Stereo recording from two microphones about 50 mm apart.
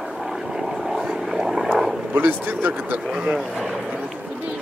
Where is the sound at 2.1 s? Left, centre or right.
Right.